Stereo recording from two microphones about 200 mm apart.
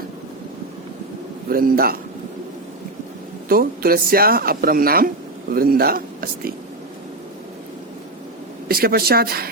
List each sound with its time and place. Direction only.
1.5 s speech: 45° right (ahead or behind)
3.5 s speech: 50° right (ahead or behind)
8.6 s speech: 50° right (ahead or behind)